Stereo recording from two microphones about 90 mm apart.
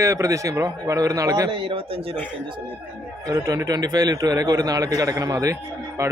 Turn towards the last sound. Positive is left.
turn(degrees=-35)  # may be behind; listen again after turning